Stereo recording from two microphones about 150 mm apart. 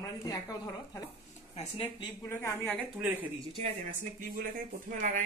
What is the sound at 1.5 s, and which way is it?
Speech, 40° left (ahead or behind).